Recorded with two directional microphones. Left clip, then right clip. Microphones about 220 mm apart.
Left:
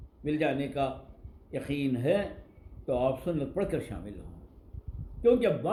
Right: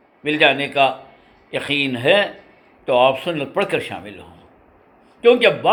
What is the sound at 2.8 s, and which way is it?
A man's voice, 40° right (ahead or behind).